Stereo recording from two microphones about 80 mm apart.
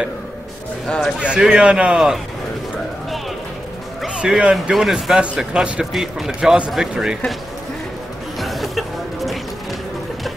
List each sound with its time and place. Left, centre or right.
0.8 s a man's voice: centre
1.2 s speech: centre
4.0 s speech: centre
5.2 s speech: centre
8.4 s music: centre